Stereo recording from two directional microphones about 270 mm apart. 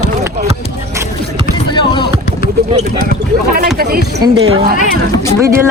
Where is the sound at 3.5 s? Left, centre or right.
Right.